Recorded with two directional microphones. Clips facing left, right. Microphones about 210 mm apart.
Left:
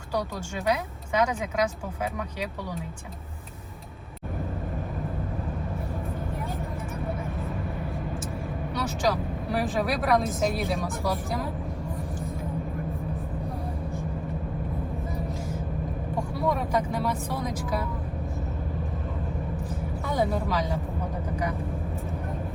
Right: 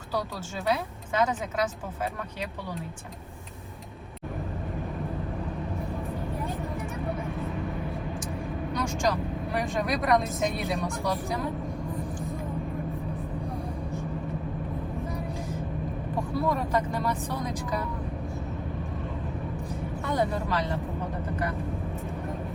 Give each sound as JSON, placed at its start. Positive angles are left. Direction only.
{"t": 0.1, "sound": "speech", "side_deg": 15}
{"t": 8.7, "sound": "speech", "side_deg": 5}
{"t": 16.1, "sound": "speech", "side_deg": 15}
{"t": 20.1, "sound": "speech", "side_deg": 5}